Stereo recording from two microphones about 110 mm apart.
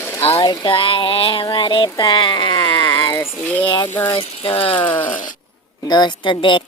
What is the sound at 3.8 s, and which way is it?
Speech, 20° left (ahead or behind).